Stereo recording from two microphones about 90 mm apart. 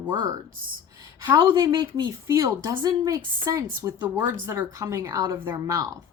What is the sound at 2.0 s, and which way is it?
Speech, 35° right (ahead or behind).